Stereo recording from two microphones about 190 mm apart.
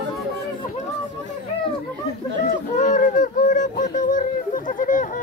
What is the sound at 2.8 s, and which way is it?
Honk, 40° left (ahead or behind).